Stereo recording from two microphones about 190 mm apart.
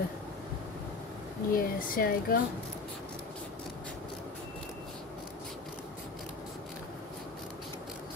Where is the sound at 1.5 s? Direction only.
50° left (ahead or behind).